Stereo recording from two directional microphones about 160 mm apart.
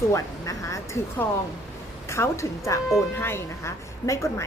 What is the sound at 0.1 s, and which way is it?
Speech, 20° left (ahead or behind).